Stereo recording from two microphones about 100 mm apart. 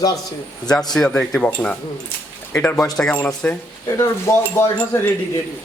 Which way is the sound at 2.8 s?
5° left (ahead or behind).